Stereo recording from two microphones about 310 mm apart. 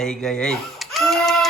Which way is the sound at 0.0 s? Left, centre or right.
Centre.